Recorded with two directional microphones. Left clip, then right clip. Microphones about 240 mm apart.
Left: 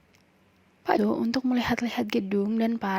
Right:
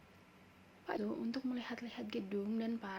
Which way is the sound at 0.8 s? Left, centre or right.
Left.